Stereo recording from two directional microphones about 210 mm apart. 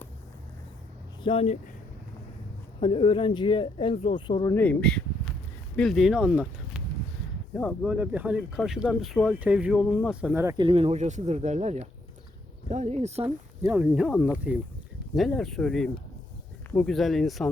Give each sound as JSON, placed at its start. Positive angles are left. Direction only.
{"t": 1.2, "sound": "speech", "side_deg": 25}
{"t": 2.8, "sound": "speech", "side_deg": 25}
{"t": 4.5, "sound": "a sound", "side_deg": 5}
{"t": 5.7, "sound": "speech", "side_deg": 0}
{"t": 7.5, "sound": "speech", "side_deg": 5}
{"t": 10.6, "sound": "speech", "side_deg": -25}
{"t": 13.2, "sound": "speech", "side_deg": -10}